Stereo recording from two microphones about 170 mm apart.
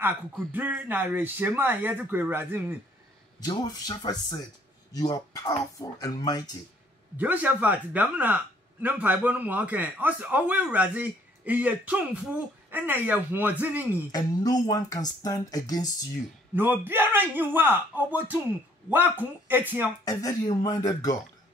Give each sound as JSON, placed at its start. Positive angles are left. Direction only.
{"t": 0.5, "sound": "a man's voice", "side_deg": -10}
{"t": 3.3, "sound": "speech", "side_deg": 25}
{"t": 7.2, "sound": "a man's voice", "side_deg": -10}
{"t": 14.1, "sound": "speech", "side_deg": 20}
{"t": 16.5, "sound": "a man's voice", "side_deg": -10}
{"t": 20.1, "sound": "speech", "side_deg": 20}